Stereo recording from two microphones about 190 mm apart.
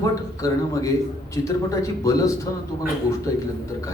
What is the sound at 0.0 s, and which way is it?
Speech, 15° left (ahead or behind).